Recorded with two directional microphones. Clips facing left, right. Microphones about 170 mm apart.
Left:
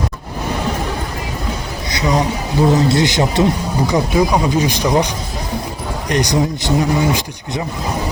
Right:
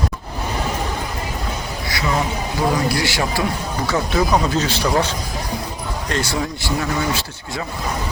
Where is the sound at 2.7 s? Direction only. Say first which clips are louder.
Left 6 dB; 20° left (ahead or behind).